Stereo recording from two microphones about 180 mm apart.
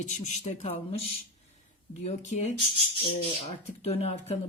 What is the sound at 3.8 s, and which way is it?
Speech, 35° left (ahead or behind).